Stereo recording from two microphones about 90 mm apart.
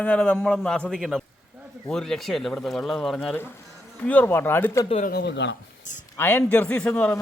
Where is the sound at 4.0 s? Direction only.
15° left (ahead or behind).